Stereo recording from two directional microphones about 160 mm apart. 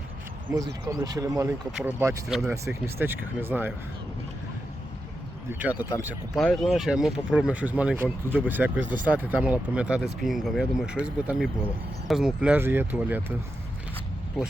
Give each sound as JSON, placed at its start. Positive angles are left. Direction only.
{"t": 0.5, "sound": "speech", "side_deg": -25}
{"t": 5.5, "sound": "speech", "side_deg": -10}
{"t": 6.4, "sound": "speech", "side_deg": 0}